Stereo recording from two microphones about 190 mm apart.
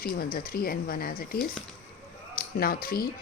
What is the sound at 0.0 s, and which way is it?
A woman's voice, 50° left (ahead or behind).